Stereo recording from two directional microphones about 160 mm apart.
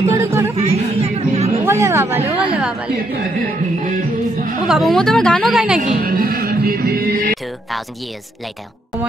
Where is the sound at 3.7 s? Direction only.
55° right (ahead or behind).